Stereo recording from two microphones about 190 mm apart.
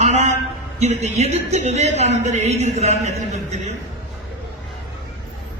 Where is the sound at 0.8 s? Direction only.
35° right (ahead or behind).